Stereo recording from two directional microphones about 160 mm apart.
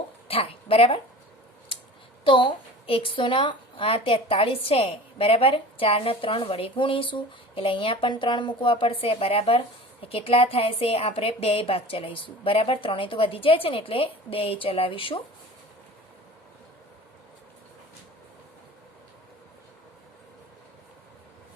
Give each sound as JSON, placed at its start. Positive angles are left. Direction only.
{"t": 0.3, "sound": "a woman's voice", "side_deg": 35}
{"t": 2.2, "sound": "a woman's voice", "side_deg": 35}